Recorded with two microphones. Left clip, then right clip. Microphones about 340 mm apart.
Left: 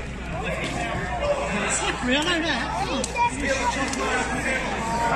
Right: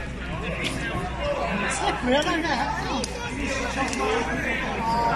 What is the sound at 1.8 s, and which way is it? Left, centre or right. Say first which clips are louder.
Speech: right 2 dB; right.